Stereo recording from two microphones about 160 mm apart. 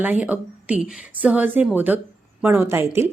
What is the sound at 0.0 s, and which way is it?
A woman's voice, 10° right (ahead or behind).